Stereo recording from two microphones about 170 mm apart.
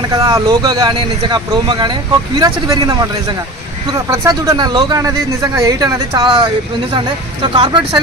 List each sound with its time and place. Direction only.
0.1 s speech: 20° right (ahead or behind)
4.1 s speech: 20° right (ahead or behind)
7.5 s speech: 30° right (ahead or behind)